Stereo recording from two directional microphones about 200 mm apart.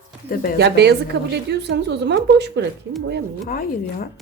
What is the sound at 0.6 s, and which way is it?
A woman's voice, 55° right (ahead or behind).